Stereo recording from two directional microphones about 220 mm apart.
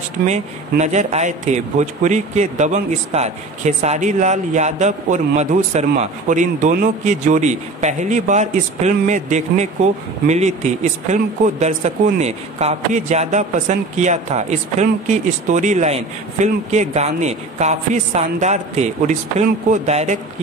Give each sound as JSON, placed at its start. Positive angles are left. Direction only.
{"t": 0.3, "sound": "a man's voice", "side_deg": -30}